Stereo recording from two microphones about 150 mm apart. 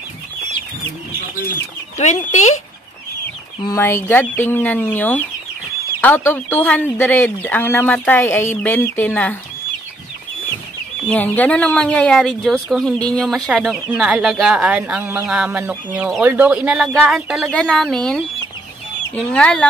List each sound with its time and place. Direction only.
2.0 s speech: 50° left (ahead or behind)
3.6 s speech: 20° left (ahead or behind)
11.1 s speech: 10° left (ahead or behind)